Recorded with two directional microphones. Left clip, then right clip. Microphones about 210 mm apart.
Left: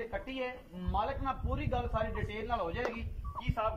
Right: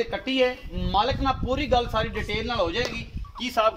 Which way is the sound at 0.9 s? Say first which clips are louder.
Right 11 dB; 40° right (ahead or behind).